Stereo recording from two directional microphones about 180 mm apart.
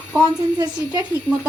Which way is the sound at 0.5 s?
25° right (ahead or behind).